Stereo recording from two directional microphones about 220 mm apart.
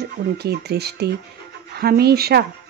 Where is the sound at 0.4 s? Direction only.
45° right (ahead or behind).